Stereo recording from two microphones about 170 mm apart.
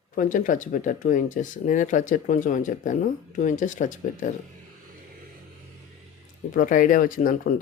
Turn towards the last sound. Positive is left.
turn(degrees=55)  # may be behind; listen again after turning